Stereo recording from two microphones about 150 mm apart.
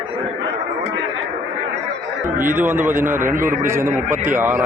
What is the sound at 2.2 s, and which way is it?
A man's voice, 15° right (ahead or behind).